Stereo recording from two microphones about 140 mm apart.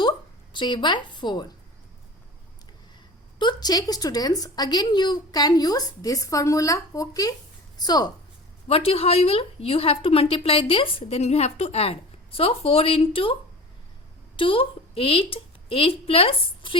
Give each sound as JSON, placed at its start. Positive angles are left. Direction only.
{"t": 0.5, "sound": "speech", "side_deg": 35}
{"t": 3.3, "sound": "a woman's voice", "side_deg": 30}
{"t": 8.6, "sound": "a woman's voice", "side_deg": 45}
{"t": 14.3, "sound": "a woman's voice", "side_deg": 40}